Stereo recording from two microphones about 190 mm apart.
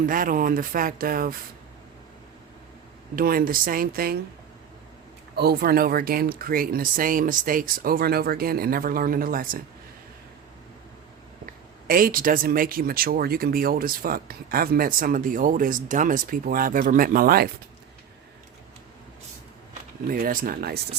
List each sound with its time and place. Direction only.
0.0 s speech: 45° right (ahead or behind)
3.2 s speech: 50° right (ahead or behind)
5.4 s speech: 55° right (ahead or behind)
11.4 s speech: 50° right (ahead or behind)
20.1 s speech: 50° right (ahead or behind)